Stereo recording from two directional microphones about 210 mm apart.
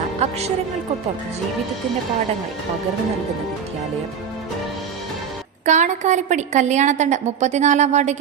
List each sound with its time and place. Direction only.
0.2 s a woman's voice: 30° right (ahead or behind)
5.6 s a woman's voice: 35° right (ahead or behind)